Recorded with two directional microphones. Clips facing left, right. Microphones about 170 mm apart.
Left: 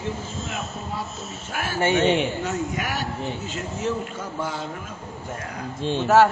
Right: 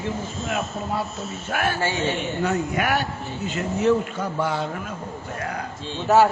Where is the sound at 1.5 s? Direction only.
65° right (ahead or behind).